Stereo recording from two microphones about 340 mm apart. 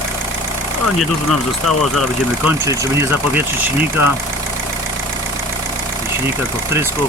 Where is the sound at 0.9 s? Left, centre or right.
Centre.